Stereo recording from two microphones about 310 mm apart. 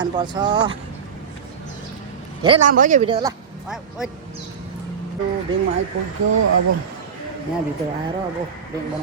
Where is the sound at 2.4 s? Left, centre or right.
Centre.